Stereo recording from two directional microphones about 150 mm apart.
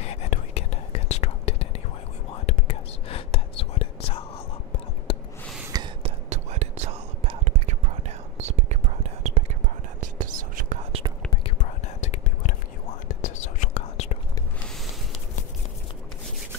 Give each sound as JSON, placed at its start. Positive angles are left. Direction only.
{"t": 0.0, "sound": "whispering", "side_deg": 45}
{"t": 5.1, "sound": "a sound", "side_deg": 40}
{"t": 5.7, "sound": "whispering", "side_deg": -25}
{"t": 6.0, "sound": "whispering", "side_deg": -45}
{"t": 9.9, "sound": "whispering", "side_deg": -60}
{"t": 10.9, "sound": "whispering", "side_deg": -40}
{"t": 11.8, "sound": "whispering", "side_deg": 50}